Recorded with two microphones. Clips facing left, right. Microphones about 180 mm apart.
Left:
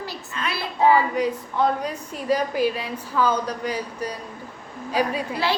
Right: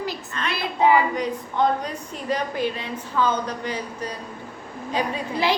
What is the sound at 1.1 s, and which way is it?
A woman's voice, 5° left (ahead or behind).